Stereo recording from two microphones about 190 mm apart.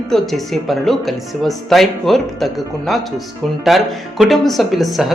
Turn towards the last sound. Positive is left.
turn(degrees=0)  # may be behind; listen again after turning